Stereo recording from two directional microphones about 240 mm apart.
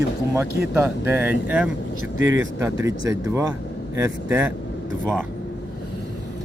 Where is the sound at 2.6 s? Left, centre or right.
Centre.